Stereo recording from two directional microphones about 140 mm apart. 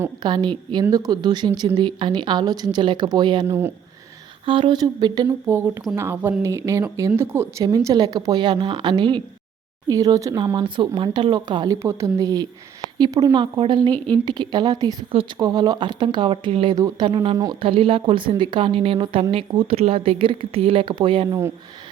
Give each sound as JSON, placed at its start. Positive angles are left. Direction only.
{"t": 0.2, "sound": "speech", "side_deg": -35}
{"t": 3.4, "sound": "speech", "side_deg": -15}
{"t": 4.4, "sound": "speech", "side_deg": -35}
{"t": 5.5, "sound": "speech", "side_deg": -15}
{"t": 16.7, "sound": "speech", "side_deg": -25}
{"t": 17.6, "sound": "speech", "side_deg": -40}